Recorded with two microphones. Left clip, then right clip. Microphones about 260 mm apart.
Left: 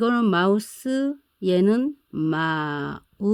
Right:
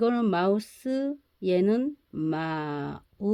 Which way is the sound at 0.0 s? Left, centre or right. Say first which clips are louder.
Left 4 dB; left.